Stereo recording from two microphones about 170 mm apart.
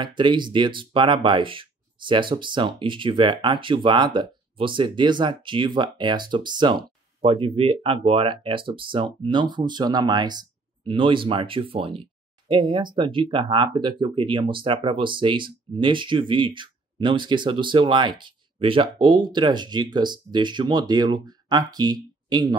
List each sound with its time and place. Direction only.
0.0 s speech: 30° right (ahead or behind)